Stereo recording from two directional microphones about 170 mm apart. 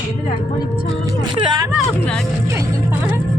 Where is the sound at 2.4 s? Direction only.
15° right (ahead or behind).